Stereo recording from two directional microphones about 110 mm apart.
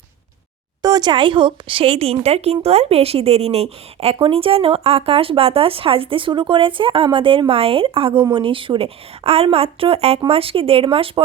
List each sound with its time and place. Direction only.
0.8 s speech: 35° right (ahead or behind); by 11.2 s 55° right (ahead or behind)